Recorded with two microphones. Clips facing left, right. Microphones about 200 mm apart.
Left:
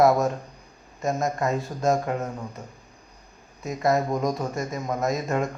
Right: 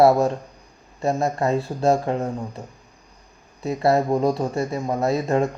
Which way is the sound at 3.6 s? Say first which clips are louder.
Right 4 dB; 30° right (ahead or behind).